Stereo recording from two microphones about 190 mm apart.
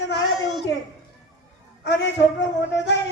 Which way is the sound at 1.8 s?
70° left (ahead or behind).